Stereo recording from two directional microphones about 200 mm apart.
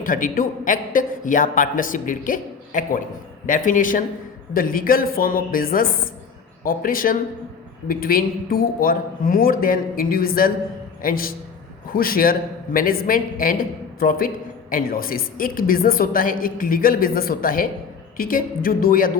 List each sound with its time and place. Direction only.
0.0 s a man's voice: 40° left (ahead or behind)